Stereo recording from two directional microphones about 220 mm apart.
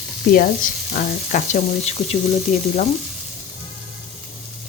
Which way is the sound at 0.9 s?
35° left (ahead or behind).